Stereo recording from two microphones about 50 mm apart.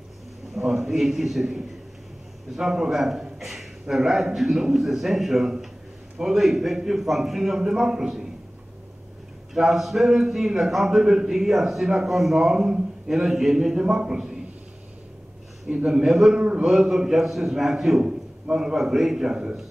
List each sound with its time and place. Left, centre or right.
0.6 s a man's voice: centre
2.5 s a man's voice: centre
9.5 s a man's voice: centre
15.6 s a man's voice: centre
16.3 s a man's voice: right
16.6 s a man's voice: centre